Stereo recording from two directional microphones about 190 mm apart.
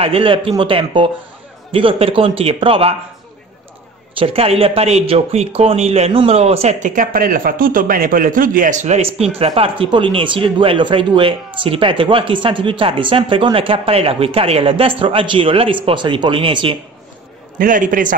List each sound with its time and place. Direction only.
0.0 s speech: 30° right (ahead or behind)
4.2 s speech: 30° right (ahead or behind)
17.6 s a man's voice: 45° right (ahead or behind)